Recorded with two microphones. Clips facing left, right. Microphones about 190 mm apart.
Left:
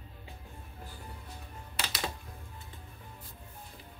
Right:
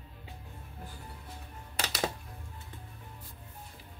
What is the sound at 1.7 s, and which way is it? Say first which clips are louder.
Music: right 4 dB; 45° right (ahead or behind).